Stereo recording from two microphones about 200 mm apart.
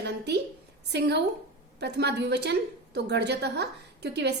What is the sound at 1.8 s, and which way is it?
A woman's voice, 60° right (ahead or behind).